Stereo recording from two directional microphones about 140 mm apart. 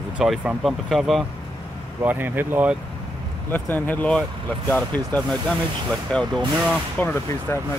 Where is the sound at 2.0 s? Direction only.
15° right (ahead or behind).